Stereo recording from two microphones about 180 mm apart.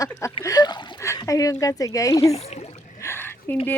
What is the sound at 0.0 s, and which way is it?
Speech, 15° left (ahead or behind).